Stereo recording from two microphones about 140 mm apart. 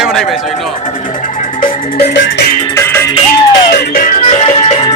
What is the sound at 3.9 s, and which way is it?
Music, 85° left.